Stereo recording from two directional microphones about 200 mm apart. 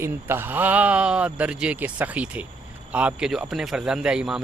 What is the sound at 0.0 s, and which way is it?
A man's voice, 10° right (ahead or behind).